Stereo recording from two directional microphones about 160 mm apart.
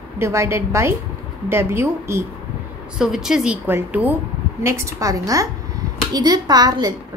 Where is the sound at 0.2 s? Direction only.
15° right (ahead or behind).